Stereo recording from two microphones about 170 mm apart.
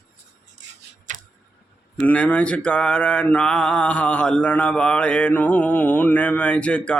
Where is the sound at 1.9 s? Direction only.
10° left (ahead or behind).